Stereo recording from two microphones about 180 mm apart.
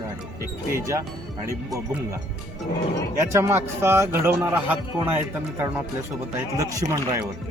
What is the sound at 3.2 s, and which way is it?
Speech, 15° right (ahead or behind).